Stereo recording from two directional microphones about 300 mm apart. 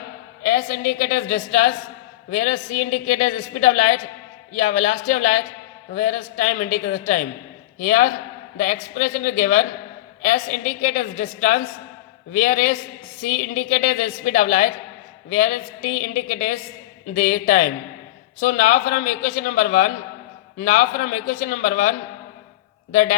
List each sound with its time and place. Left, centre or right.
0.4 s a woman's voice: left
21.4 s a woman's voice: left